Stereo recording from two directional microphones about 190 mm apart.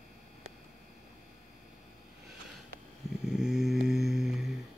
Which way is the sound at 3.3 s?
5° right (ahead or behind).